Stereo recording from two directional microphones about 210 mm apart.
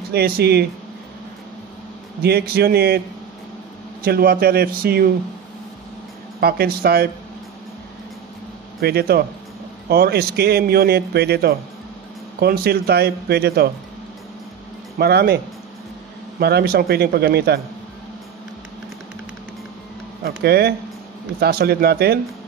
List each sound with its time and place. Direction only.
0.1 s a man's voice: 50° right (ahead or behind)
2.2 s a man's voice: 50° right (ahead or behind)
4.0 s a man's voice: 45° right (ahead or behind)
6.4 s a man's voice: 45° right (ahead or behind)
8.8 s a man's voice: 50° right (ahead or behind)
15.0 s a man's voice: 50° right (ahead or behind)
16.3 s a man's voice: 50° right (ahead or behind)
20.4 s a man's voice: 50° right (ahead or behind)